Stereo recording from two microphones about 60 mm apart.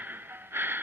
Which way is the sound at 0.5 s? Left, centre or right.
Right.